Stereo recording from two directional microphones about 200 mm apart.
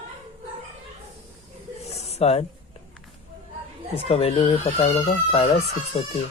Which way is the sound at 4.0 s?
30° left (ahead or behind).